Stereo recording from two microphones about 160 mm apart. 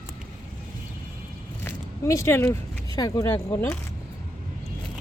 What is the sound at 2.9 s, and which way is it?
Speech, 25° left (ahead or behind).